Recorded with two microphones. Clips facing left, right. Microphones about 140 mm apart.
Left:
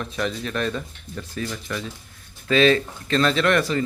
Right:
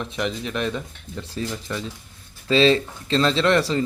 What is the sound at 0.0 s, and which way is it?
Speech, 20° right (ahead or behind).